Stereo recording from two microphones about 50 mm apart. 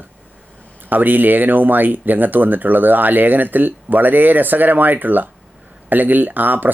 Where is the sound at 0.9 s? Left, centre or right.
Right.